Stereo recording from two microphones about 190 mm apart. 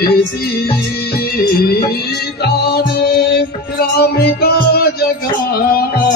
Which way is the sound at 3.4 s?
55° left (ahead or behind).